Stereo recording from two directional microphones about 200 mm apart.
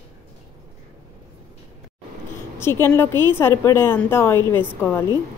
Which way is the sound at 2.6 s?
10° left (ahead or behind).